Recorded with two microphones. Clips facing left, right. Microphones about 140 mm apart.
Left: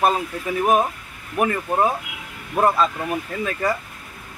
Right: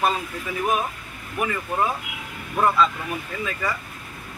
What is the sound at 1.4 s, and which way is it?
Speech, 45° left (ahead or behind).